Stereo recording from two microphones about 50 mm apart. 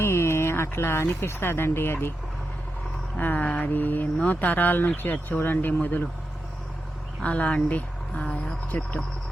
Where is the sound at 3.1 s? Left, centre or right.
Left.